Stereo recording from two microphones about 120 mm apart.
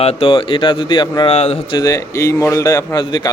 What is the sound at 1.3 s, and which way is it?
Speech, 60° left (ahead or behind).